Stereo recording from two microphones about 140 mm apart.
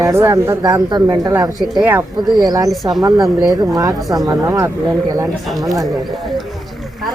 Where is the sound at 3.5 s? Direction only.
25° right (ahead or behind).